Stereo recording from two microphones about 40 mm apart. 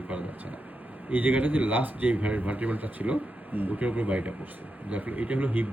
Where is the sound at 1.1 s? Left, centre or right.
Right.